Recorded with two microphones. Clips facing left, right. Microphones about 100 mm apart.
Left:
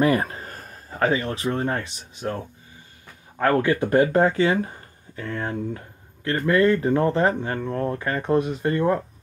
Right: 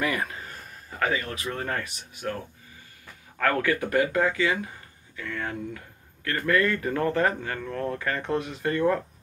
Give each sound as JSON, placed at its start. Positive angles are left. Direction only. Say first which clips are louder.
{"t": 0.0, "sound": "speech", "louder": "left 8 dB", "side_deg": 35}